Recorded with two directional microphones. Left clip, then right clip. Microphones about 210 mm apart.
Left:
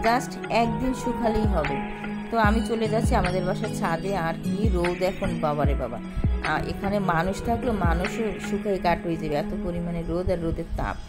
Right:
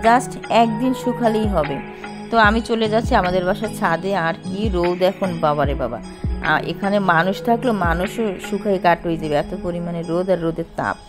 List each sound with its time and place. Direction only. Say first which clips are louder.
0.0 s speech: right 8 dB; 25° right (ahead or behind)